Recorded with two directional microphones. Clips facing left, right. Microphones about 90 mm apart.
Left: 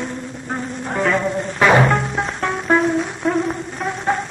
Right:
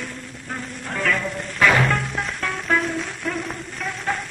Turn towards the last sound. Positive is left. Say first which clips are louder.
# left 6 dB
turn(degrees=25)  # may be behind; listen again after turning